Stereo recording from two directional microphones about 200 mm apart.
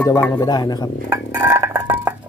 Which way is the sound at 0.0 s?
15° left (ahead or behind).